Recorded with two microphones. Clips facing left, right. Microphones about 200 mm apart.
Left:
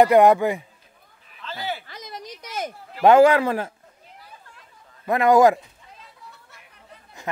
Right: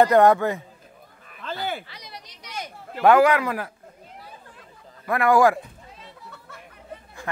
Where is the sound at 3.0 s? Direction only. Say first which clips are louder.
Left 3 dB; 25° left (ahead or behind).